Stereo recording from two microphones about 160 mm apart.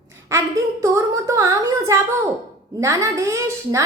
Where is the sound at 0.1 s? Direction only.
15° right (ahead or behind).